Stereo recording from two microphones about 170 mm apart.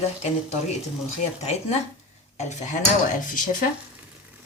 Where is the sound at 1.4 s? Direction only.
40° left (ahead or behind).